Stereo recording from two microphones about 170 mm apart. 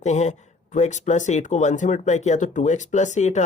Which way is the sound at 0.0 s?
45° left (ahead or behind).